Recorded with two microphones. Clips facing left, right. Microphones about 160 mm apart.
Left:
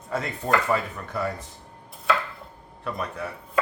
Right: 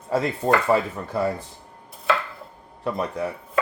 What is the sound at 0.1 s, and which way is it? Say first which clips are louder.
Speech: right 5 dB; 30° right (ahead or behind).